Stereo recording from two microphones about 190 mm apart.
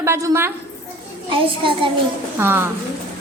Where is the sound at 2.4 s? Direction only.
10° right (ahead or behind).